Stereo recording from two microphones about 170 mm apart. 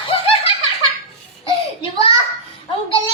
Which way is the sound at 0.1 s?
30° left (ahead or behind).